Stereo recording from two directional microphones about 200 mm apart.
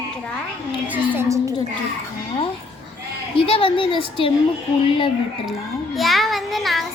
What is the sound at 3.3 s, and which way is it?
Speech, 25° left (ahead or behind).